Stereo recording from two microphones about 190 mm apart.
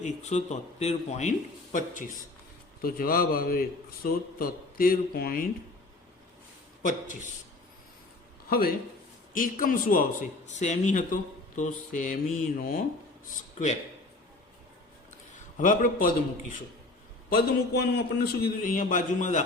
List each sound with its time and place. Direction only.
0.0 s a man's voice: 40° left (ahead or behind)
8.4 s a man's voice: 50° left (ahead or behind)
15.5 s a man's voice: 45° left (ahead or behind)
17.2 s a man's voice: 55° left (ahead or behind); by 19.5 s 40° left (ahead or behind)